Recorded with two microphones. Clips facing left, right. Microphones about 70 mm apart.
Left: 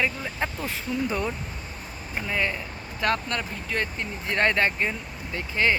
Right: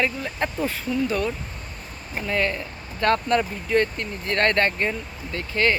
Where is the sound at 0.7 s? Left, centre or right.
Centre.